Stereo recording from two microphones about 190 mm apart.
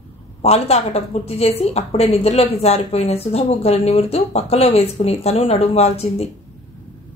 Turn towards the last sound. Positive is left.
turn(degrees=35)  # may be behind; listen again after turning